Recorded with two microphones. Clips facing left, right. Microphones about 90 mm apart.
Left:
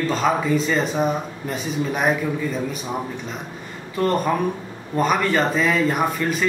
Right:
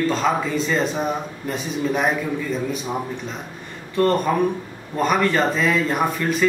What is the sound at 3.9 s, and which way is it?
Speech, centre (ahead or behind).